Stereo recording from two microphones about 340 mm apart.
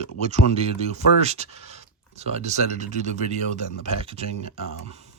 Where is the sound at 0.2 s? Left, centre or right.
Centre.